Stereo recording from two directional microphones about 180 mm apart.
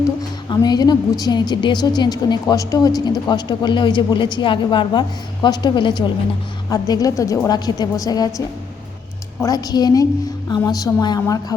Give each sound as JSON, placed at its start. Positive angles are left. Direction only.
{"t": 0.2, "sound": "a woman's voice", "side_deg": 20}
{"t": 9.4, "sound": "a woman's voice", "side_deg": 20}